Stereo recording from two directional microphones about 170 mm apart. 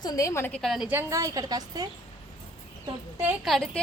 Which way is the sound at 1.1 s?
20° right (ahead or behind).